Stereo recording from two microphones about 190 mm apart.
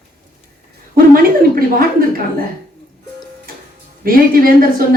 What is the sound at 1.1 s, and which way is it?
Speech, 50° right (ahead or behind).